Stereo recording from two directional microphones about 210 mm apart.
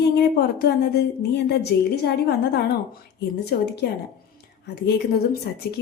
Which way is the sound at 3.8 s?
50° left (ahead or behind).